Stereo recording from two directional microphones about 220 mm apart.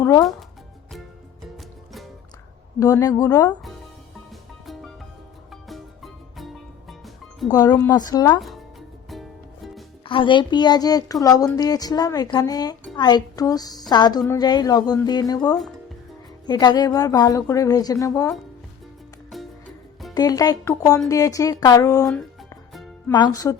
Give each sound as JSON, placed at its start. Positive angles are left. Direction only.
{"t": 0.0, "sound": "music", "side_deg": 15}
{"t": 2.8, "sound": "a woman's voice", "side_deg": 15}
{"t": 4.6, "sound": "music", "side_deg": 0}
{"t": 7.4, "sound": "a woman's voice", "side_deg": 15}
{"t": 8.4, "sound": "speech", "side_deg": 0}
{"t": 10.0, "sound": "a woman's voice", "side_deg": 25}
{"t": 20.1, "sound": "a woman's voice", "side_deg": 15}
{"t": 22.7, "sound": "music", "side_deg": 0}
{"t": 23.4, "sound": "a woman's voice", "side_deg": 15}